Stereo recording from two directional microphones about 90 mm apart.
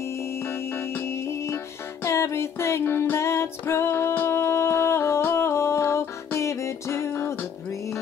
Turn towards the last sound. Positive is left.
turn(degrees=30)  # may be behind; listen again after turning